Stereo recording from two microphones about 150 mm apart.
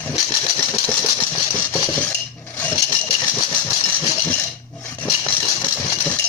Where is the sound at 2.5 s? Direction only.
10° left (ahead or behind).